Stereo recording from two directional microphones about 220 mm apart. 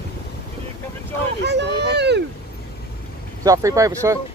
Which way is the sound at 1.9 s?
50° right (ahead or behind).